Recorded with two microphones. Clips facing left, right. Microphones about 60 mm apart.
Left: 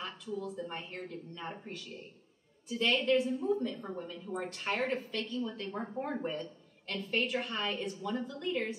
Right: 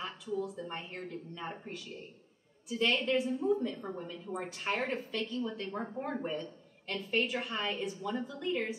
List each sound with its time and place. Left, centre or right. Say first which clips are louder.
0.0 s a woman's voice: right 2 dB; centre